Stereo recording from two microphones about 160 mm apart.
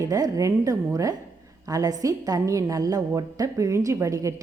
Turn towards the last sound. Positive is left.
turn(degrees=-20)  # may be behind; listen again after turning